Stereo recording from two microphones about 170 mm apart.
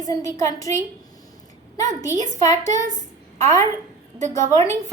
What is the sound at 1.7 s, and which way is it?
Speech, 20° left (ahead or behind).